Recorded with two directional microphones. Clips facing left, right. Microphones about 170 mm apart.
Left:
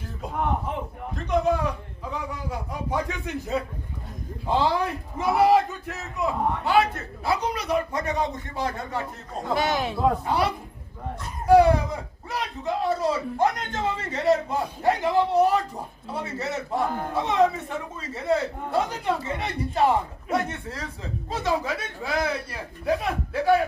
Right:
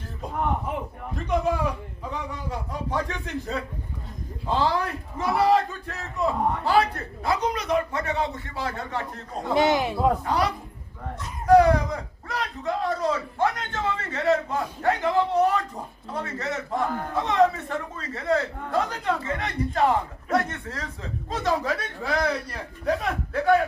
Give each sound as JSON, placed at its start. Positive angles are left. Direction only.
{"t": 1.1, "sound": "a man's voice", "side_deg": -5}
{"t": 2.9, "sound": "a man's voice", "side_deg": 10}
{"t": 6.0, "sound": "a man's voice", "side_deg": 0}
{"t": 7.5, "sound": "a man's voice", "side_deg": 10}
{"t": 9.6, "sound": "a man's voice", "side_deg": -15}
{"t": 10.2, "sound": "a man's voice", "side_deg": 5}